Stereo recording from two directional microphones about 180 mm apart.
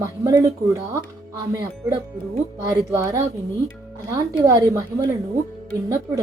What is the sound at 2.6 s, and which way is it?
Speech, 15° right (ahead or behind).